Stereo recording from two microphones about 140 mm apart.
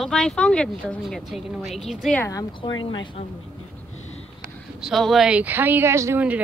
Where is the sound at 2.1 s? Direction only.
20° left (ahead or behind).